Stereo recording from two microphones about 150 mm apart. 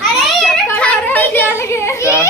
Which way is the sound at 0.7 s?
10° left (ahead or behind).